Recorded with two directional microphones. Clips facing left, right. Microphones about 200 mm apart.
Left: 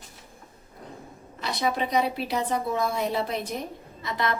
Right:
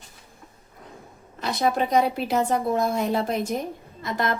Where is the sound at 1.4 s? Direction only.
50° right (ahead or behind).